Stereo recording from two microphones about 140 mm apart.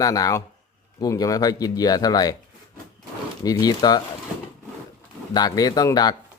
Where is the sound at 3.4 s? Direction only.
30° left (ahead or behind).